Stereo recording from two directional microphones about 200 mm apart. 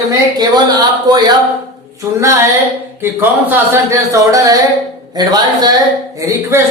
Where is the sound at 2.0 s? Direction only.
15° right (ahead or behind).